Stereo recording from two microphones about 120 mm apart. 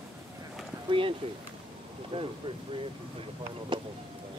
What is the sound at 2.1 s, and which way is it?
Speech, 60° right (ahead or behind).